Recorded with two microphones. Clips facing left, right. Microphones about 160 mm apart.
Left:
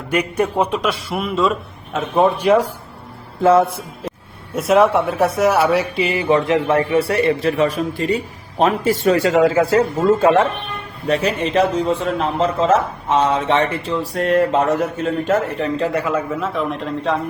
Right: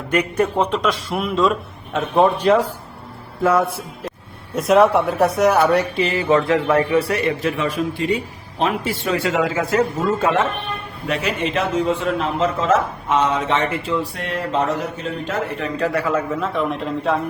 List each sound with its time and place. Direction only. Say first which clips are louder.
0.1 s a man's voice: even; 10° left (ahead or behind)
2.4 s a man's voice: left 1 dB; 10° left (ahead or behind)
3.4 s speech: left 4 dB; 25° left (ahead or behind)
4.5 s a man's voice: even; centre (ahead or behind); by 15.4 s 50° left (ahead or behind)
15.5 s speech: left 2 dB; 25° left (ahead or behind)
16.3 s a man's voice: even; centre (ahead or behind)